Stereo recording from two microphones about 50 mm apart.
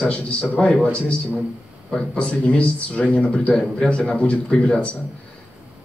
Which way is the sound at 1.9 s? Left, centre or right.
Centre.